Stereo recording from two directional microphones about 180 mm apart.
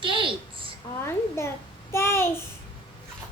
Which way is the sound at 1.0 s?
15° left (ahead or behind).